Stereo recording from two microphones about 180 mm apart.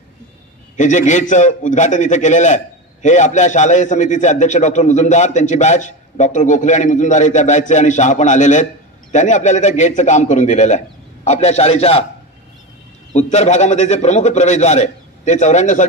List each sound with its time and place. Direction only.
0.7 s a man's voice: 40° left (ahead or behind)
13.1 s a man's voice: 40° left (ahead or behind)